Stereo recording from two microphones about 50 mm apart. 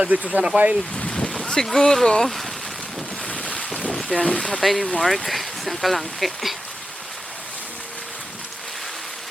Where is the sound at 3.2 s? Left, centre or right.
Left.